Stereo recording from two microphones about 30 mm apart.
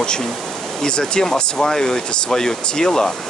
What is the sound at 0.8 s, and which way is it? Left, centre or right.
Speech, left.